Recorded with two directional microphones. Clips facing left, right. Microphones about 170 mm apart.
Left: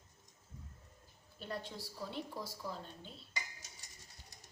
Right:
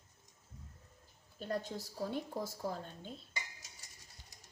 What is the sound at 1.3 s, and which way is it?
Speech, 45° right (ahead or behind).